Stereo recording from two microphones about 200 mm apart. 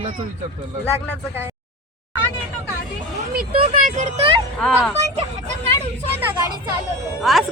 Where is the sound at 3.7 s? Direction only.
40° right (ahead or behind).